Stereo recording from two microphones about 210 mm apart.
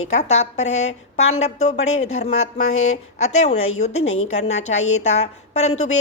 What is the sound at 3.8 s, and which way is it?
A woman's voice, 30° left (ahead or behind).